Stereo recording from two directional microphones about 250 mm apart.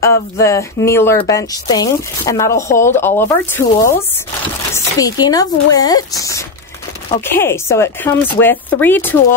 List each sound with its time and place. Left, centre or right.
0.0 s speech: centre